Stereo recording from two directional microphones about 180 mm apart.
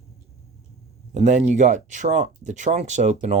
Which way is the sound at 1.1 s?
40° right (ahead or behind).